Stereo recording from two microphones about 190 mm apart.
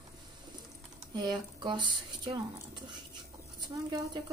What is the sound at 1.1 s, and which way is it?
Speech, 25° right (ahead or behind).